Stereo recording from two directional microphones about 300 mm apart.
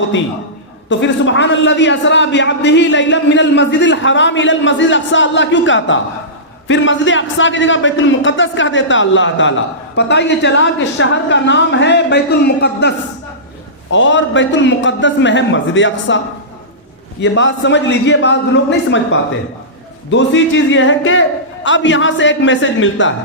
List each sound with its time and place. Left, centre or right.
0.9 s a man's voice: left
13.9 s a man's voice: left